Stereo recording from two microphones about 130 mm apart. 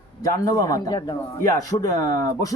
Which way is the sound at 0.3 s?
25° left (ahead or behind).